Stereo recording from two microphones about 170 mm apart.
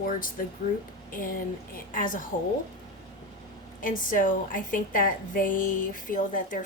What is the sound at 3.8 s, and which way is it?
A woman's voice, 50° left (ahead or behind).